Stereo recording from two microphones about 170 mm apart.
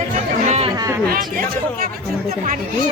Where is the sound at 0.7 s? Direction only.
20° right (ahead or behind).